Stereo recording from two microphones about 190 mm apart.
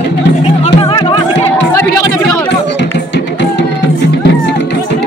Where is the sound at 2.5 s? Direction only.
65° left (ahead or behind).